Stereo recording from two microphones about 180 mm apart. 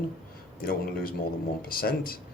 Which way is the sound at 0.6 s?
55° left (ahead or behind).